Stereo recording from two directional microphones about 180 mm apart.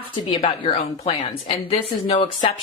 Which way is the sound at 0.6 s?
35° left (ahead or behind).